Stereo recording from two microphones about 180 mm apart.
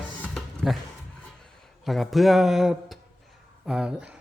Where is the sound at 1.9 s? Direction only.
Centre (ahead or behind).